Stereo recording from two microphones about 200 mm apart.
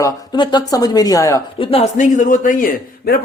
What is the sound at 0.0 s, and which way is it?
Speech, 20° left (ahead or behind).